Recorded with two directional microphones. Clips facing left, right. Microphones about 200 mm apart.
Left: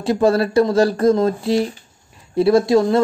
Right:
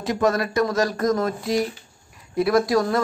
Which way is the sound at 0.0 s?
30° left (ahead or behind).